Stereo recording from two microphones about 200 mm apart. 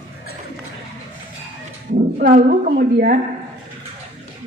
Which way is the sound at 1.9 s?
45° right (ahead or behind).